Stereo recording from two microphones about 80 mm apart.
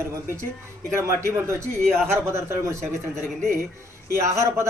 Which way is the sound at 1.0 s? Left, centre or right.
Right.